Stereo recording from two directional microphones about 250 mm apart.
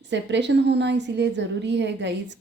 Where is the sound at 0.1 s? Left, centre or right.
Right.